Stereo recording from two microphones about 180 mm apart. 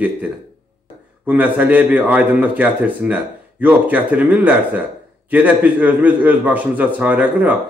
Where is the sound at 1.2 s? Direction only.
10° right (ahead or behind).